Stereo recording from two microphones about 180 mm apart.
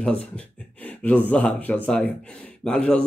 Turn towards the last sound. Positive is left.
turn(degrees=5)  # may be behind; listen again after turning